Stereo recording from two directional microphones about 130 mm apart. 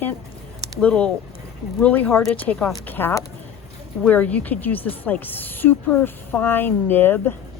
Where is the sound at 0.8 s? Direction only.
10° left (ahead or behind).